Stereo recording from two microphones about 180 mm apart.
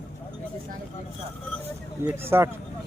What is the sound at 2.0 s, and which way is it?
Speech, 15° right (ahead or behind).